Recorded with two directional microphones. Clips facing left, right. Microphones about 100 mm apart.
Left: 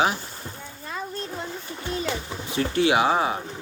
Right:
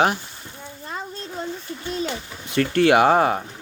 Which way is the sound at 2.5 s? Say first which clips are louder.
Right 5 dB; 60° right (ahead or behind).